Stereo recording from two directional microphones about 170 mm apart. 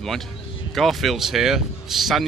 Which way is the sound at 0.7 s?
Centre (ahead or behind).